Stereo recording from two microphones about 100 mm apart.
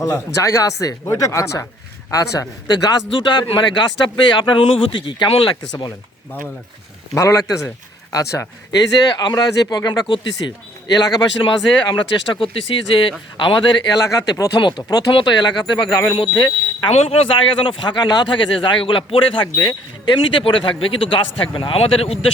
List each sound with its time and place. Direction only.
0.0 s a man's voice: 35° left (ahead or behind); by 5.5 s 60° left (ahead or behind)
7.1 s speech: 30° left (ahead or behind)
9.1 s speech: 45° left (ahead or behind)
11.4 s a man's voice: 55° left (ahead or behind)
14.1 s speech: 35° left (ahead or behind)
14.6 s speech: 45° left (ahead or behind)
16.9 s a man's voice: 90° left